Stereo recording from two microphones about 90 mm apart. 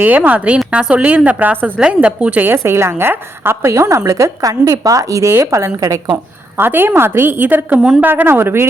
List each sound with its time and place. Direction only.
0.0 s a woman's voice: 15° right (ahead or behind); by 6.0 s 40° right (ahead or behind)
6.6 s a woman's voice: 25° right (ahead or behind)